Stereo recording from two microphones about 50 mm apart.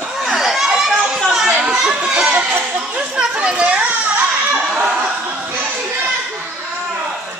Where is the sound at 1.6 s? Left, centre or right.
Centre.